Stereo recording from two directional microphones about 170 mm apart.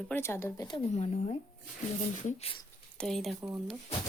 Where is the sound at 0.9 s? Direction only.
35° left (ahead or behind).